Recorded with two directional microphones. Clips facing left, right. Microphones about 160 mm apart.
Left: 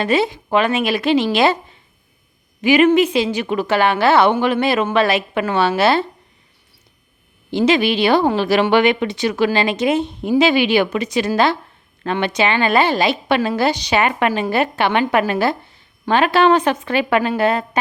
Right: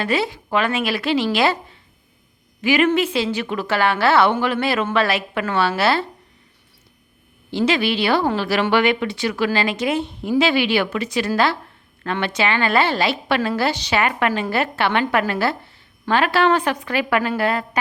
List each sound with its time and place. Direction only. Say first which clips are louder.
0.0 s a woman's voice: left 4 dB; 20° left (ahead or behind)
7.5 s a woman's voice: left 4 dB; 20° left (ahead or behind)